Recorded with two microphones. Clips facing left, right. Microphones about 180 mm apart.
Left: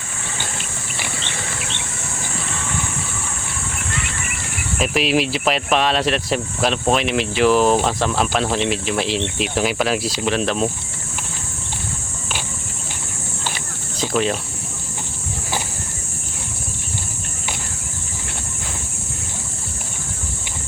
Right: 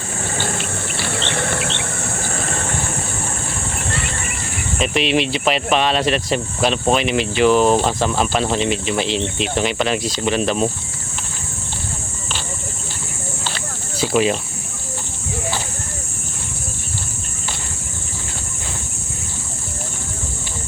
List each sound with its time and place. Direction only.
1.1 s vehicle: 60° right (ahead or behind); by 2.9 s 45° right (ahead or behind)
3.9 s a sound: 40° right (ahead or behind)
4.8 s speech: centre (ahead or behind)
14.0 s speech: 5° right (ahead or behind)